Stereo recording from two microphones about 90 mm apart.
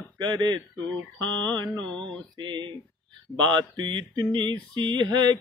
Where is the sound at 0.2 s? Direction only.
55° right (ahead or behind).